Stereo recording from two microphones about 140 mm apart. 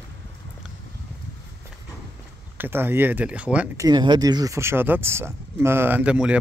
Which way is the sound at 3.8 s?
30° right (ahead or behind).